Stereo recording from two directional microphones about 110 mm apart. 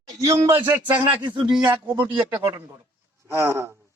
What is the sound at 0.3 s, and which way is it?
Speech, 20° right (ahead or behind).